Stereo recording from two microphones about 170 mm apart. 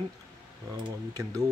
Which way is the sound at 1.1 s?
20° right (ahead or behind).